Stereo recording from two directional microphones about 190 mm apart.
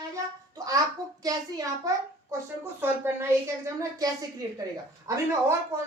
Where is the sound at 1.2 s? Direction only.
20° right (ahead or behind).